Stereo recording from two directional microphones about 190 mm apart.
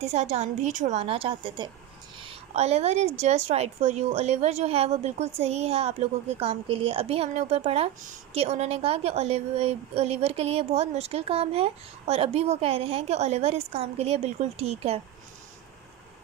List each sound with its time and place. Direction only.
0.0 s a woman's voice: 35° right (ahead or behind)
2.1 s a sound: 30° right (ahead or behind)
3.2 s a woman's voice: 35° right (ahead or behind)